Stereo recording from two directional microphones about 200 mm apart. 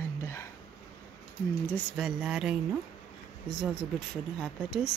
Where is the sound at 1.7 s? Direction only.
Centre (ahead or behind).